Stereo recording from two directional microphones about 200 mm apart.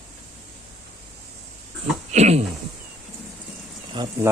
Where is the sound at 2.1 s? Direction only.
35° right (ahead or behind).